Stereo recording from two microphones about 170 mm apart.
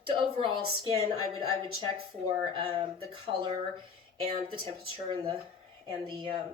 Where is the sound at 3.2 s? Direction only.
30° right (ahead or behind).